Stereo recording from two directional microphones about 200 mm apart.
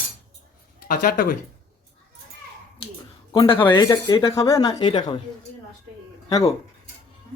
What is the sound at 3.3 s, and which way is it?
Speech, 25° left (ahead or behind).